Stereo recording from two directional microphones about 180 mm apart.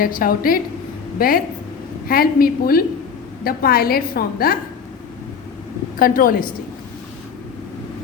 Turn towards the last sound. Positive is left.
turn(degrees=50)  # may be behind; listen again after turning